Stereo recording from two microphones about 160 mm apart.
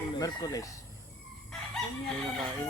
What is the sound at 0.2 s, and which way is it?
Speech, 25° left (ahead or behind).